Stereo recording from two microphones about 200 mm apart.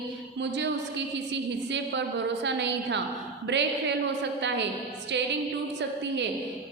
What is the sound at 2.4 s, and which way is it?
A woman's voice, 60° right (ahead or behind).